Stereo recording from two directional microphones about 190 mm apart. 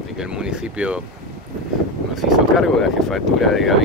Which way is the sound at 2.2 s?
Centre (ahead or behind).